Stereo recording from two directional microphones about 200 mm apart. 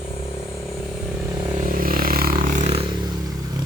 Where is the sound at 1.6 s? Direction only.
45° right (ahead or behind).